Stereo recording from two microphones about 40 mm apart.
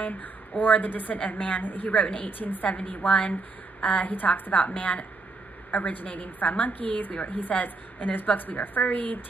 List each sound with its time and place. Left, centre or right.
0.0 s a woman's voice: left